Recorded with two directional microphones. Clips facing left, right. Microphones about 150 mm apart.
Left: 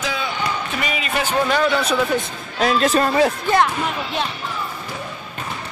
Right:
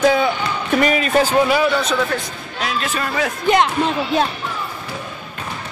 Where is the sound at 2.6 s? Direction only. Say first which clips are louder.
Left 6 dB; 40° left (ahead or behind).